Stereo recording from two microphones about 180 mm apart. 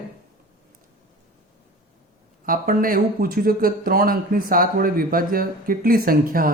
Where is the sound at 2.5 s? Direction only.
50° right (ahead or behind).